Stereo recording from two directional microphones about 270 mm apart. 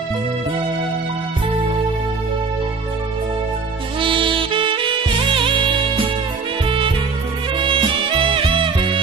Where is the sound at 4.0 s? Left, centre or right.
Centre.